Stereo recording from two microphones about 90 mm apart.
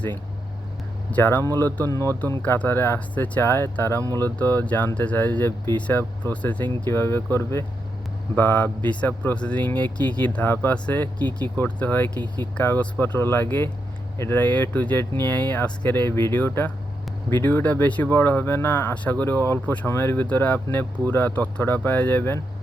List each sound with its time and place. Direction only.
1.1 s speech: 25° left (ahead or behind)
6.8 s speech: 30° left (ahead or behind)